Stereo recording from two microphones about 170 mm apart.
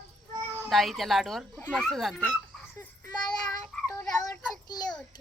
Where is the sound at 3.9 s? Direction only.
20° left (ahead or behind).